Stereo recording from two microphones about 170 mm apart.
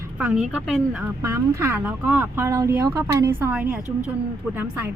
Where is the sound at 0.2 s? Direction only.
10° right (ahead or behind).